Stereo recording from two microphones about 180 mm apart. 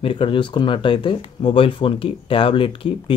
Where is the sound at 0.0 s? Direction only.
30° left (ahead or behind).